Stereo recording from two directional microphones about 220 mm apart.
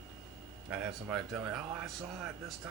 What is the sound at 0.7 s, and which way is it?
Speech, 5° right (ahead or behind).